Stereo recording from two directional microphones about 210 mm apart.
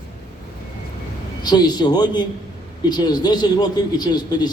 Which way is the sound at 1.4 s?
20° left (ahead or behind).